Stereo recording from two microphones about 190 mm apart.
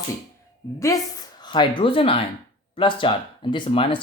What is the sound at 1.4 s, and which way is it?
Speech, 25° left (ahead or behind).